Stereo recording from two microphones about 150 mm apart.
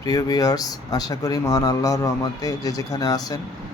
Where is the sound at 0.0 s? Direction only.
25° left (ahead or behind).